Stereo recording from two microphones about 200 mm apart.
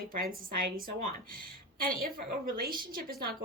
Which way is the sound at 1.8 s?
45° right (ahead or behind).